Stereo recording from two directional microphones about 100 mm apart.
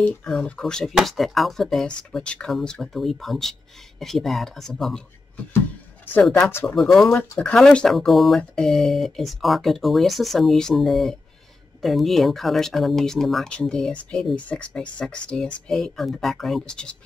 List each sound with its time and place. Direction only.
0.0 s speech: 10° left (ahead or behind)
6.7 s speech: 5° left (ahead or behind)
7.2 s speech: 15° left (ahead or behind)